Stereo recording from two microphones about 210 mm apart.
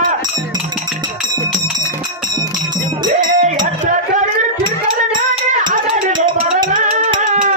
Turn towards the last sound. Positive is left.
turn(degrees=-35)  # may be behind; listen again after turning